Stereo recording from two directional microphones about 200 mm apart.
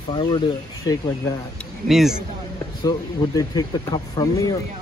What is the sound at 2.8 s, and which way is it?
Speech, 20° left (ahead or behind).